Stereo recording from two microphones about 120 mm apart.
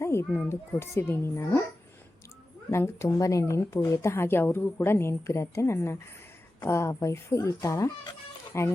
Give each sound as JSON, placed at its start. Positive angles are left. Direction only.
{"t": 0.0, "sound": "a woman's voice", "side_deg": 20}
{"t": 2.6, "sound": "a woman's voice", "side_deg": 25}